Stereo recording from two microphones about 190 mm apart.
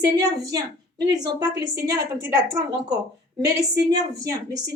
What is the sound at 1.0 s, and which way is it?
A woman's voice, 20° right (ahead or behind).